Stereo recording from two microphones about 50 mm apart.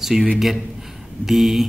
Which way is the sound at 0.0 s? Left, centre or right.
Centre.